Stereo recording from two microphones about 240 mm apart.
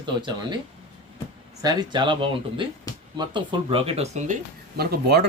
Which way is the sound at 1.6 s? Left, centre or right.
Centre.